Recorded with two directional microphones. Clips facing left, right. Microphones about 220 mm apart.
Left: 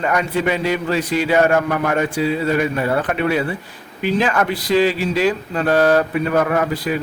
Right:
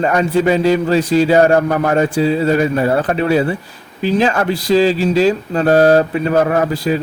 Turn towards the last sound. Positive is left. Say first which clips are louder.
# right 4 dB
turn(degrees=-30)  # may be behind; listen again after turning